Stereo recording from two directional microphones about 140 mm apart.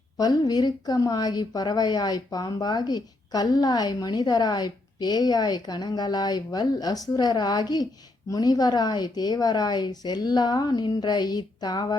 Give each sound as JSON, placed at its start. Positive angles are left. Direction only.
{"t": 0.2, "sound": "a woman's voice", "side_deg": 30}